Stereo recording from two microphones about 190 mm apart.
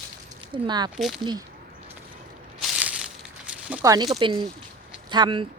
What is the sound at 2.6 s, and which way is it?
Crushing, 5° right (ahead or behind).